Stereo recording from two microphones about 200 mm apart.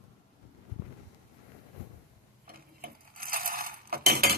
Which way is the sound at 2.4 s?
50° right (ahead or behind).